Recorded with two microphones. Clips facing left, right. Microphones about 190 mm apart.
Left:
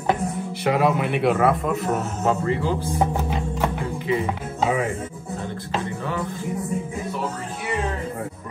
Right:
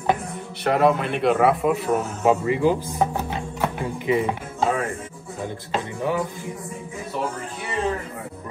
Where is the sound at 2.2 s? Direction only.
15° right (ahead or behind).